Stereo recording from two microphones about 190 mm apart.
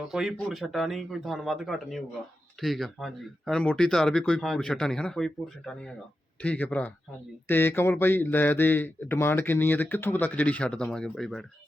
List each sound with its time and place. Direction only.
0.1 s a man's voice: centre (ahead or behind)